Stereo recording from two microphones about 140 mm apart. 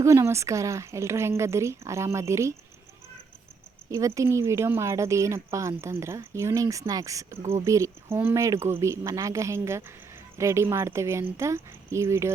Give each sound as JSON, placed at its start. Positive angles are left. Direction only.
{"t": 0.0, "sound": "speech", "side_deg": -20}
{"t": 3.9, "sound": "speech", "side_deg": -20}